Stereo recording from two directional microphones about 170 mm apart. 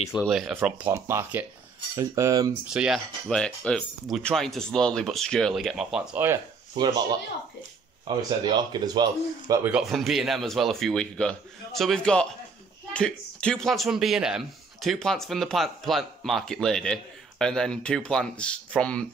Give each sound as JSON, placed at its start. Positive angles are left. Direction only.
{"t": 0.2, "sound": "a man's voice", "side_deg": 0}
{"t": 0.6, "sound": "speech", "side_deg": -10}
{"t": 2.6, "sound": "a man's voice", "side_deg": -5}
{"t": 6.7, "sound": "speech", "side_deg": -25}
{"t": 9.7, "sound": "a man's voice", "side_deg": -5}